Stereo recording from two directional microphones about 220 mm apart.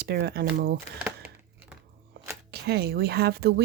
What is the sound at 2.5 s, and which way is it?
Speech, 45° right (ahead or behind).